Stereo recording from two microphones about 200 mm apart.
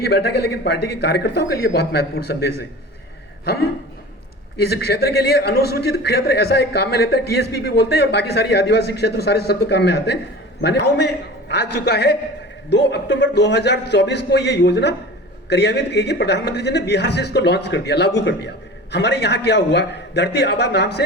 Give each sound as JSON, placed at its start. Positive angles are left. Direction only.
{"t": 0.1, "sound": "speech", "side_deg": 55}
{"t": 4.6, "sound": "a man's voice", "side_deg": 55}